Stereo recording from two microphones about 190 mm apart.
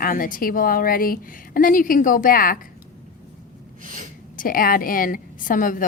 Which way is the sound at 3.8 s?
40° right (ahead or behind).